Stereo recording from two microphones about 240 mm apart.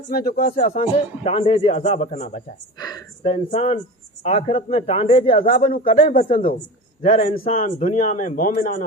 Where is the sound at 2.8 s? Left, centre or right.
Centre.